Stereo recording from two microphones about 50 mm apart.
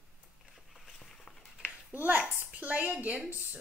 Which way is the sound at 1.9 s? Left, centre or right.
Right.